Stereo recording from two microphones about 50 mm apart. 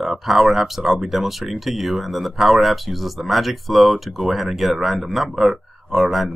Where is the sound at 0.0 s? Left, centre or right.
Centre.